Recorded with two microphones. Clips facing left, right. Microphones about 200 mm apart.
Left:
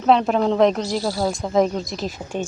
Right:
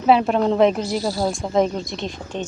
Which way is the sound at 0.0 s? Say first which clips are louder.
Right 1 dB; 5° right (ahead or behind).